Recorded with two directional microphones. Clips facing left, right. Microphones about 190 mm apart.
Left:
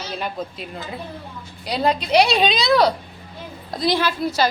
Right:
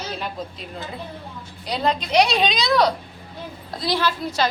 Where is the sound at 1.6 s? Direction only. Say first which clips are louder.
Left 2 dB; 5° left (ahead or behind).